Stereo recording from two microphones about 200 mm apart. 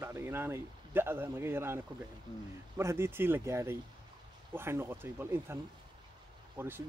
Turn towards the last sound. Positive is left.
turn(degrees=-10)  # may be behind; listen again after turning